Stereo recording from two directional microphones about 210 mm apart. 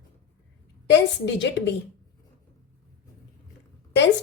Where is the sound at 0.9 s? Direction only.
55° left (ahead or behind).